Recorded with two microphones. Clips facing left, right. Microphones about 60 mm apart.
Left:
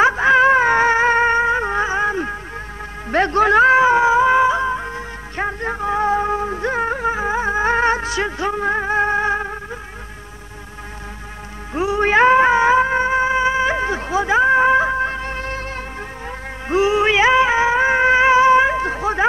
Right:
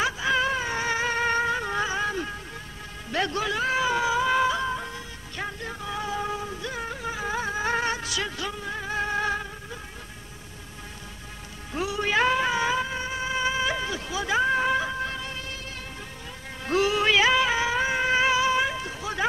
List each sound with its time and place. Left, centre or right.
0.0 s a sound: left
3.1 s music: left
8.5 s music: left
11.7 s music: left
16.6 s music: left